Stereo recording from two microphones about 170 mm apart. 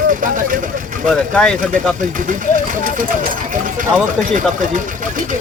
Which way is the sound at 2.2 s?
50° right (ahead or behind).